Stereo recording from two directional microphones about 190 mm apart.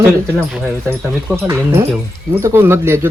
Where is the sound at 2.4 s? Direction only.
15° right (ahead or behind).